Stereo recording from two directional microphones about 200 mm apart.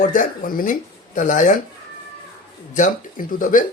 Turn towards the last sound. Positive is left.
turn(degrees=40)  # may be behind; listen again after turning